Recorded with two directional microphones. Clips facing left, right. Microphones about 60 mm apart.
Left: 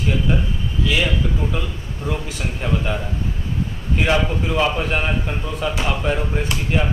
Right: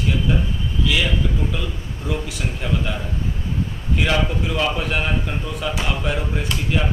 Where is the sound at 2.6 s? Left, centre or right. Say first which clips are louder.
Left 3 dB; centre.